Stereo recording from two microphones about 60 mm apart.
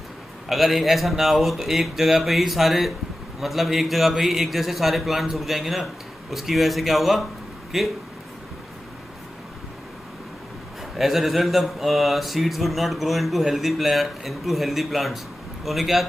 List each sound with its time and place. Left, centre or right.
0.5 s speech: centre
11.0 s speech: centre